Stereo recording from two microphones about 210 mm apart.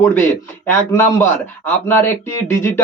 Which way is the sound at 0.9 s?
10° left (ahead or behind).